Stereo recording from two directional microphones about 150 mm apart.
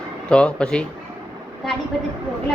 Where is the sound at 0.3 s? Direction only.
5° left (ahead or behind).